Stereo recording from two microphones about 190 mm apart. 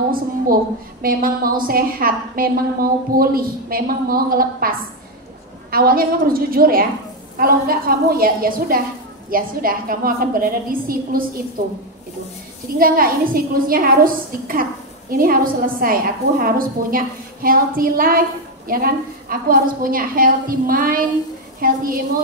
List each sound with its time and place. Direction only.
1.0 s a woman's voice: 50° right (ahead or behind)